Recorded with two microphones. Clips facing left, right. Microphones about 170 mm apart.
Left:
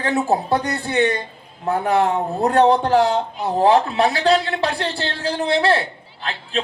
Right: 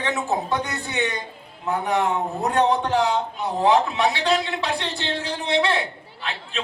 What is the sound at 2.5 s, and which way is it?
A man's voice, 35° left (ahead or behind).